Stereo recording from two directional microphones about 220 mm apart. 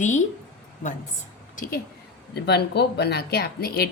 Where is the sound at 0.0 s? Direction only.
35° left (ahead or behind).